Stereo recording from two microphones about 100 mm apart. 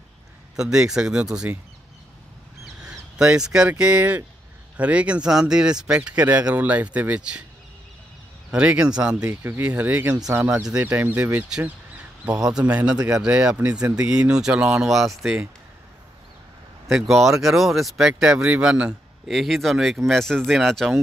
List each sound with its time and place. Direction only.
0.6 s speech: 5° right (ahead or behind)
2.6 s speech: 5° right (ahead or behind)
8.5 s speech: 10° right (ahead or behind)
9.2 s speech: 20° right (ahead or behind)
12.3 s a man's voice: 35° right (ahead or behind)
12.5 s speech: 10° right (ahead or behind)
16.8 s speech: centre (ahead or behind)